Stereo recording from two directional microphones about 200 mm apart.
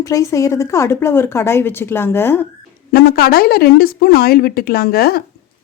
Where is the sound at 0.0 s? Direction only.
15° left (ahead or behind).